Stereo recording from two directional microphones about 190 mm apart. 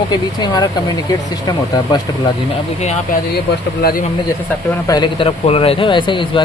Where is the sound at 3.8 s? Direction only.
55° left (ahead or behind).